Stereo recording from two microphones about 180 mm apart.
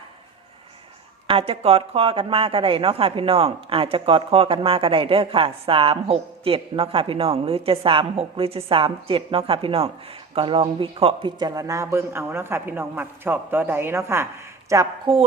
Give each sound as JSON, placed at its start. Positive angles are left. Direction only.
{"t": 1.3, "sound": "a woman's voice", "side_deg": -30}
{"t": 15.1, "sound": "a woman's voice", "side_deg": -30}